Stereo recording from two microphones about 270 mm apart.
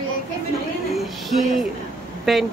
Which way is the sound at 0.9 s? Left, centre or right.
Centre.